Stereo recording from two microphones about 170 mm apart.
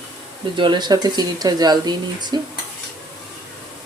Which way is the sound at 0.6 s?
25° right (ahead or behind).